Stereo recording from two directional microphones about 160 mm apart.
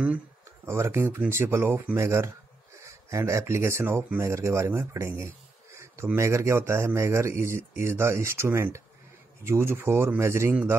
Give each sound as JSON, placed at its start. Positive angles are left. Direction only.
{"t": 0.7, "sound": "speech", "side_deg": -15}